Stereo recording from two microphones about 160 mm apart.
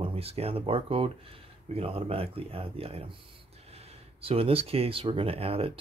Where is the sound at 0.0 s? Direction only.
35° right (ahead or behind).